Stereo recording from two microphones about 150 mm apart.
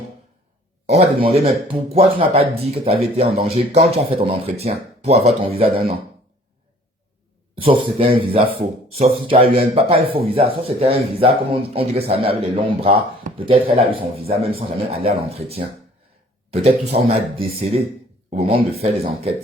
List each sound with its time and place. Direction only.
0.9 s speech: 45° right (ahead or behind)
7.5 s speech: 40° right (ahead or behind)